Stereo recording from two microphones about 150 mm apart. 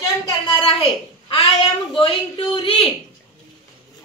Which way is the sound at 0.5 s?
35° left (ahead or behind).